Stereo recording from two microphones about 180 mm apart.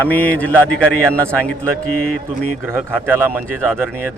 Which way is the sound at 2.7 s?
10° right (ahead or behind).